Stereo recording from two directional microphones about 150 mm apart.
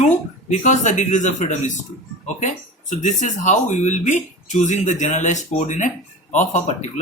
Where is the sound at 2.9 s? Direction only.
55° left (ahead or behind).